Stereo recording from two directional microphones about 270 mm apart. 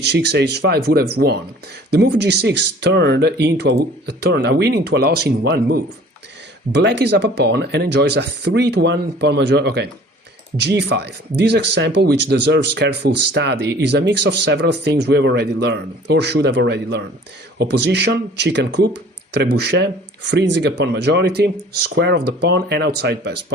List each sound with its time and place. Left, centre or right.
0.0 s speech: right